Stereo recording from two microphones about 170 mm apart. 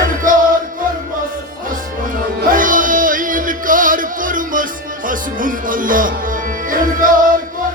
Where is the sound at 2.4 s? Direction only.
55° right (ahead or behind).